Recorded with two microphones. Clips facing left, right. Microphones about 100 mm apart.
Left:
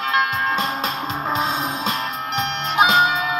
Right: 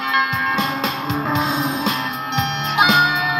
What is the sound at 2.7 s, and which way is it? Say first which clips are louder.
Music: even; 35° left (ahead or behind).